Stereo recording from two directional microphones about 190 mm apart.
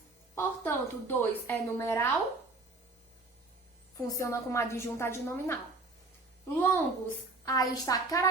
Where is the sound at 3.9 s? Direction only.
15° left (ahead or behind).